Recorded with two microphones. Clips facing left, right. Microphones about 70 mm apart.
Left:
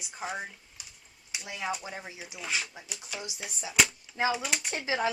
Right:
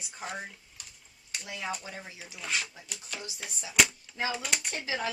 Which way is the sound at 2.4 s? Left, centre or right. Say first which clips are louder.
Even; centre.